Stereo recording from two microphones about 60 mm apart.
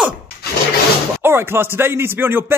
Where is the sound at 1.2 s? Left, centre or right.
Right.